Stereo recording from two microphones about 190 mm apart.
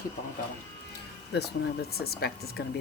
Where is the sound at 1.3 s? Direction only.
55° left (ahead or behind).